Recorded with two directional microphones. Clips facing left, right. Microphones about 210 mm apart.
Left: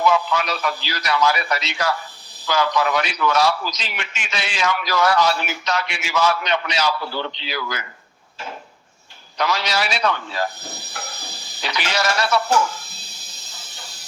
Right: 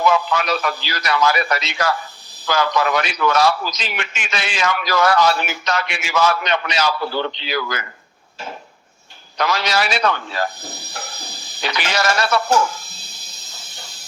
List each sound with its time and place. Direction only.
0.1 s a man's voice: 55° right (ahead or behind)
9.4 s a man's voice: 50° right (ahead or behind)
11.6 s a man's voice: 50° right (ahead or behind)